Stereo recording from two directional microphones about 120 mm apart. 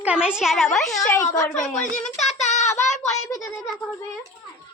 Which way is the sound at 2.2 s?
70° left (ahead or behind).